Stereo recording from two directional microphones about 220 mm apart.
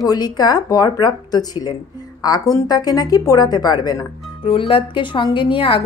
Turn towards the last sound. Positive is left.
turn(degrees=25)  # may be behind; listen again after turning